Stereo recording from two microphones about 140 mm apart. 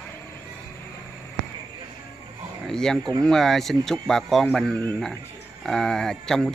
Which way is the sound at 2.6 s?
5° left (ahead or behind).